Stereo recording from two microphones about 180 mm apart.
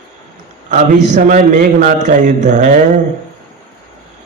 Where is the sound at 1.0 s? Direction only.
40° right (ahead or behind).